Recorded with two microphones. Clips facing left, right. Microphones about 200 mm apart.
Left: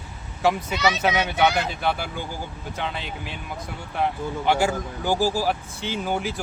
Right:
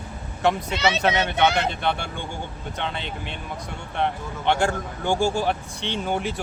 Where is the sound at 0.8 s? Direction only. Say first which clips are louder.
Even; 25° right (ahead or behind).